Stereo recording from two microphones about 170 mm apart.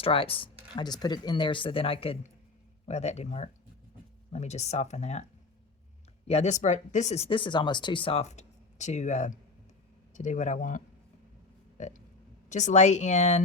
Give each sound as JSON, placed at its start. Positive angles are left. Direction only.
{"t": 0.0, "sound": "speech", "side_deg": 30}
{"t": 6.2, "sound": "speech", "side_deg": 40}
{"t": 11.8, "sound": "burping", "side_deg": 45}
{"t": 12.5, "sound": "speech", "side_deg": 45}